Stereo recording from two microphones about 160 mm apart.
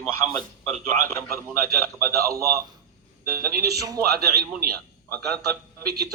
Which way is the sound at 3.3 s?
75° right (ahead or behind).